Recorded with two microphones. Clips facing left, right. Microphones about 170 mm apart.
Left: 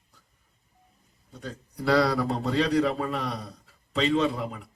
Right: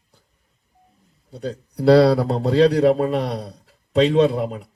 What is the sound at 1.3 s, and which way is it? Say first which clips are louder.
Speech: right 10 dB; 35° right (ahead or behind).